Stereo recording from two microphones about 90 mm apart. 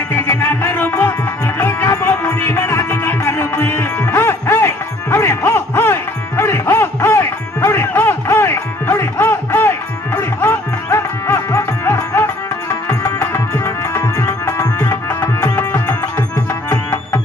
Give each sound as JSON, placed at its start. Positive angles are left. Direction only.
{"t": 0.1, "sound": "music", "side_deg": 25}
{"t": 13.0, "sound": "tabla", "side_deg": 20}
{"t": 13.7, "sound": "music", "side_deg": 35}
{"t": 15.5, "sound": "music", "side_deg": 20}